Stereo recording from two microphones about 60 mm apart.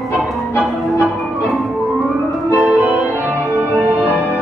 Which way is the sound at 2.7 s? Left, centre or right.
Right.